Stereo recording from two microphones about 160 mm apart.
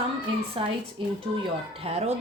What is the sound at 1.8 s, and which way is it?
Speech, 40° right (ahead or behind).